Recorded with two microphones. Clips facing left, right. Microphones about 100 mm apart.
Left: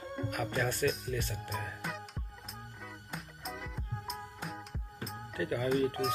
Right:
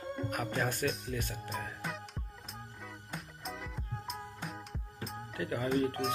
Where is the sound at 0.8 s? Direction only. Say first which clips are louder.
Left 2 dB; centre (ahead or behind).